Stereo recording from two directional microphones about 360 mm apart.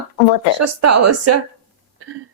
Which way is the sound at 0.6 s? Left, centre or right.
Right.